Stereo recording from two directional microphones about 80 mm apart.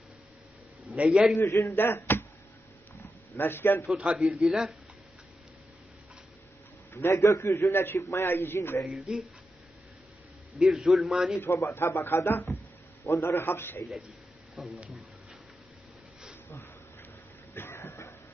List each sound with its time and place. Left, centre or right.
0.9 s a man's voice: centre
1.4 s a man's voice: left
3.3 s a man's voice: left
3.9 s speech: centre
6.9 s a man's voice: left
8.9 s speech: centre
10.6 s a man's voice: centre
11.3 s a man's voice: left
14.6 s speech: centre
17.5 s a sound: left